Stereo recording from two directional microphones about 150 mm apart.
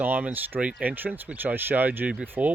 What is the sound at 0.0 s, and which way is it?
Speech, 10° right (ahead or behind).